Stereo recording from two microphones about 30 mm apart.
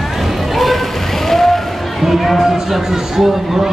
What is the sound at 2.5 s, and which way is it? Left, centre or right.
Speech, centre.